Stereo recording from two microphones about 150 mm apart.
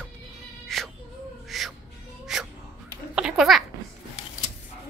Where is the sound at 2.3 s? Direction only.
5° right (ahead or behind).